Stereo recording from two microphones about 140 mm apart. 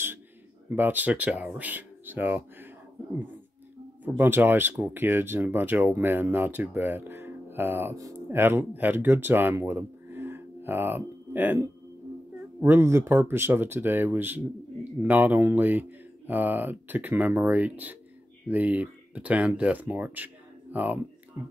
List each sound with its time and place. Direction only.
0.7 s speech: 15° right (ahead or behind)
4.2 s speech: 15° right (ahead or behind)